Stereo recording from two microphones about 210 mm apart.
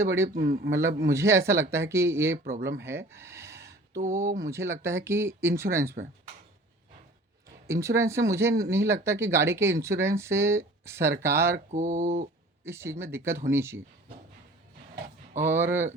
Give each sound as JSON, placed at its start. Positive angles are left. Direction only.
{"t": 0.0, "sound": "speech", "side_deg": -15}
{"t": 0.3, "sound": "a man's voice", "side_deg": -45}
{"t": 0.7, "sound": "speech", "side_deg": -15}
{"t": 2.4, "sound": "a man's voice", "side_deg": -45}
{"t": 2.8, "sound": "a sound", "side_deg": -10}
{"t": 3.9, "sound": "speech", "side_deg": -40}
{"t": 4.4, "sound": "speech", "side_deg": -15}
{"t": 7.7, "sound": "speech", "side_deg": -15}
{"t": 11.5, "sound": "speech", "side_deg": -35}
{"t": 12.6, "sound": "speech", "side_deg": -10}
{"t": 15.4, "sound": "speech", "side_deg": -10}